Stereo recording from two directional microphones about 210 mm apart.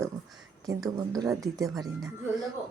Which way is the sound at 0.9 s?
15° right (ahead or behind).